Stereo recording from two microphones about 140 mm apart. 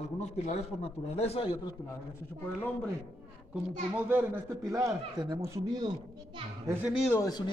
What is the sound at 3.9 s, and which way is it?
A man's voice, 15° right (ahead or behind).